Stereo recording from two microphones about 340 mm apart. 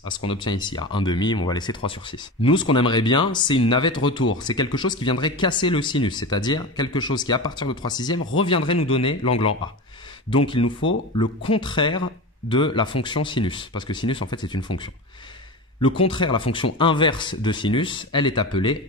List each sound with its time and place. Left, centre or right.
0.3 s speech: centre
15.8 s speech: centre